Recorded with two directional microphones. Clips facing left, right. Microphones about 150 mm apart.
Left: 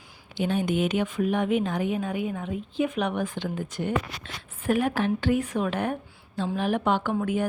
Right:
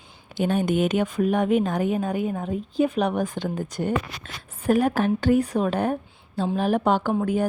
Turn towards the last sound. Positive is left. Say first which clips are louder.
# right 3 dB
turn(degrees=-35)  # may be behind; listen again after turning